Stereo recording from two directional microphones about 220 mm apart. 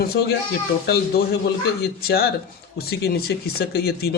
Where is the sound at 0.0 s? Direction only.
45° left (ahead or behind).